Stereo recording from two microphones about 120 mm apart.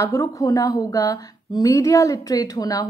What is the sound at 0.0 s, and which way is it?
A woman's voice, 25° left (ahead or behind).